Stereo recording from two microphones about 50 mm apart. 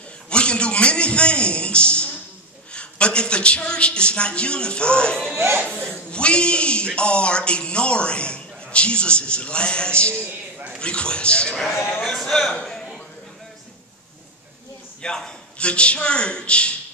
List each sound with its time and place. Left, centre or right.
0.3 s a sound: left
2.7 s a man's voice: left
5.3 s speech: right
5.7 s a man's voice: left
11.5 s a man's voice: centre
12.6 s a sound: centre
15.0 s a man's voice: centre